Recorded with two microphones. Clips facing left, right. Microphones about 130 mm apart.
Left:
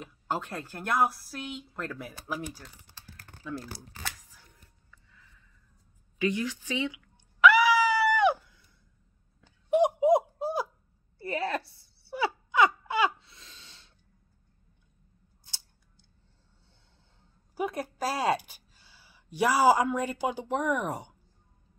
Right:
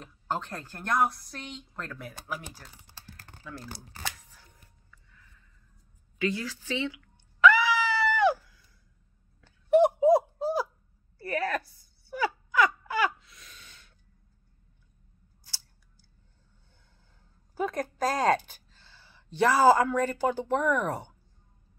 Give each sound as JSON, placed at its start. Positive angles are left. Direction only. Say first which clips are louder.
{"t": 0.0, "sound": "a woman's voice", "louder": "even", "side_deg": 5}
{"t": 6.1, "sound": "a woman's voice", "louder": "left 2 dB", "side_deg": 15}
{"t": 7.0, "sound": "screaming", "louder": "even", "side_deg": 10}
{"t": 9.4, "sound": "laughter", "louder": "right 3 dB", "side_deg": 15}
{"t": 11.1, "sound": "wail", "louder": "right 1 dB", "side_deg": 25}
{"t": 15.4, "sound": "scissors", "louder": "right 1 dB", "side_deg": 20}
{"t": 17.6, "sound": "a sound", "louder": "right 2 dB", "side_deg": 10}